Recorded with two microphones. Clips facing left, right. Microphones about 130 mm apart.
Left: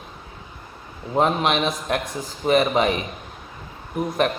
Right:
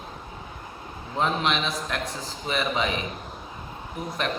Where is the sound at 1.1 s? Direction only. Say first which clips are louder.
Left 5 dB; 50° left (ahead or behind).